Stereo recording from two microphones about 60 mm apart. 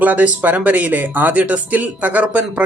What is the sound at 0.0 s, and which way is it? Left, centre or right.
Speech, right.